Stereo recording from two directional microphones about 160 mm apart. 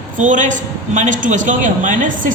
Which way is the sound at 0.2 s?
50° right (ahead or behind).